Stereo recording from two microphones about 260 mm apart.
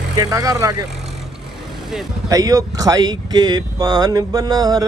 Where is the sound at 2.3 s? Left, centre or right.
Centre.